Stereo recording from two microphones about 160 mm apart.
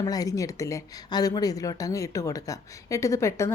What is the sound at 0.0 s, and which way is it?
Speech, 20° left (ahead or behind).